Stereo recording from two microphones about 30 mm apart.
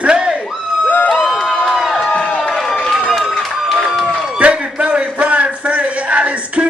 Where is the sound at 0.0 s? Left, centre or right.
Right.